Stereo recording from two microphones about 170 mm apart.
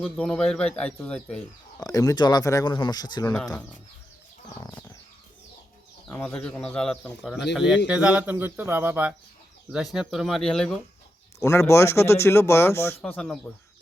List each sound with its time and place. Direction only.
0.0 s speech: 5° left (ahead or behind)
1.8 s speech: 20° left (ahead or behind)
4.6 s speech: 20° left (ahead or behind)
6.1 s speech: 5° left (ahead or behind)
11.3 s speech: 15° left (ahead or behind)